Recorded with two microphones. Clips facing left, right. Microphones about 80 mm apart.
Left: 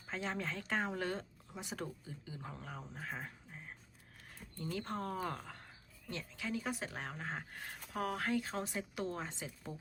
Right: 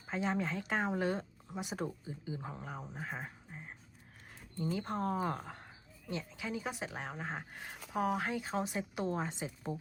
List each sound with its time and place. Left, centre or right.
0.1 s a woman's voice: centre